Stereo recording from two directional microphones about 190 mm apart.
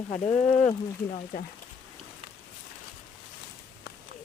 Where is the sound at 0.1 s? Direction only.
35° left (ahead or behind).